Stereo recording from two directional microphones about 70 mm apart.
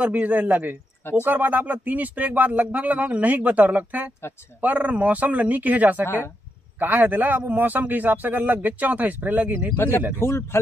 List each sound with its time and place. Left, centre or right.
0.0 s speech: right
9.8 s a man's voice: left